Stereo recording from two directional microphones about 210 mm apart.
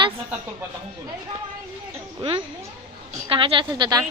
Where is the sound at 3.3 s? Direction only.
25° right (ahead or behind).